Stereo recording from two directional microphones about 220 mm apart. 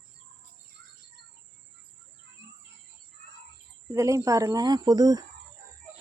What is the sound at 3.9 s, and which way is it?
Speech, 15° right (ahead or behind).